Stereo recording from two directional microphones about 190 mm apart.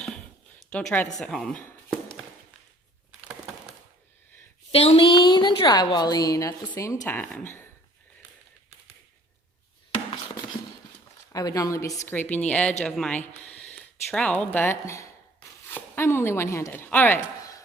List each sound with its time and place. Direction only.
0.7 s speech: 5° left (ahead or behind)
4.7 s a woman's voice: 30° left (ahead or behind); by 7.7 s 10° left (ahead or behind)
11.3 s a woman's voice: 20° left (ahead or behind)